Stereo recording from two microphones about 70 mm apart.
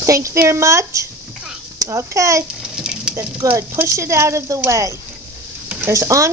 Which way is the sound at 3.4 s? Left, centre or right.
Right.